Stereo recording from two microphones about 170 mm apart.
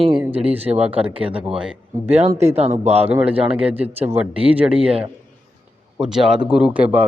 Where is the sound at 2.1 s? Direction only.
40° right (ahead or behind).